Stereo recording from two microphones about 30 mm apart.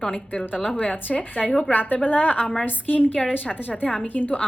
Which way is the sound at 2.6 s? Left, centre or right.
Left.